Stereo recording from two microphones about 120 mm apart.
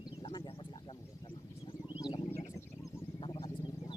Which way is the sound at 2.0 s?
40° left (ahead or behind).